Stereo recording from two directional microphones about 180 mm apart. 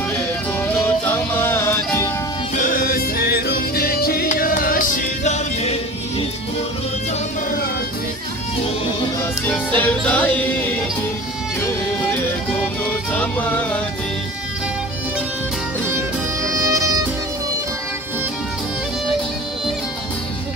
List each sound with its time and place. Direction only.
0.8 s music: 10° left (ahead or behind)
2.5 s music: 50° left (ahead or behind)
9.5 s music: 10° left (ahead or behind)
13.1 s music: 10° left (ahead or behind)
16.4 s music: 15° right (ahead or behind)